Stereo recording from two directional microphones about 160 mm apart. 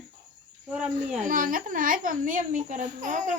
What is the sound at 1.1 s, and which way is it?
Speech, 55° right (ahead or behind).